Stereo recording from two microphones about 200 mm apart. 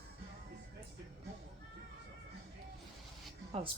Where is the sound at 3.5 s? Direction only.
30° right (ahead or behind).